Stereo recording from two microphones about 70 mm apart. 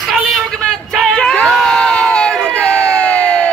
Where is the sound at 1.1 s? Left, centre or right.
Centre.